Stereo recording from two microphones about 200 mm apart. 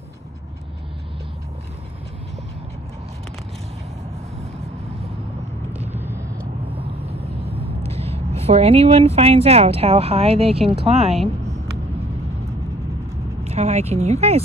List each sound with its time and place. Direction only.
5.7 s vehicle: 10° right (ahead or behind)
7.1 s a sound: 30° right (ahead or behind)
10.7 s speech: 30° right (ahead or behind)
13.5 s speech: 35° right (ahead or behind)